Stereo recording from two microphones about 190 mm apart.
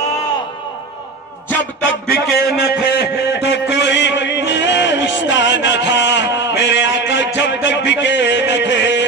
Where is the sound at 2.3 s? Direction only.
55° left (ahead or behind).